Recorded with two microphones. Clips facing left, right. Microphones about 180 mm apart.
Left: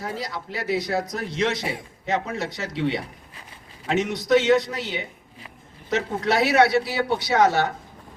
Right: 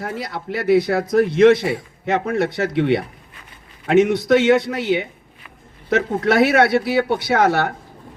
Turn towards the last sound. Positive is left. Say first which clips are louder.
# right 2 dB
turn(degrees=-55)  # may be behind; listen again after turning